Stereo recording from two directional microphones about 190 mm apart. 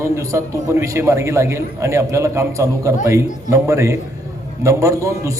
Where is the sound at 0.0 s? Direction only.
15° right (ahead or behind).